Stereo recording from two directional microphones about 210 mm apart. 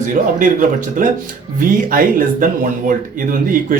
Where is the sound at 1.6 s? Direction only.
40° right (ahead or behind).